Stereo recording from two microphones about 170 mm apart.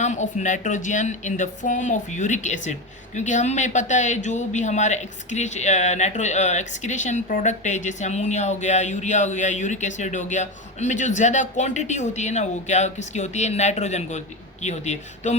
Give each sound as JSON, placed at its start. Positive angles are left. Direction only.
{"t": 0.0, "sound": "speech", "side_deg": 45}